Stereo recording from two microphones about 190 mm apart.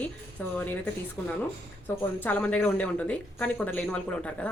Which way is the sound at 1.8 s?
10° left (ahead or behind).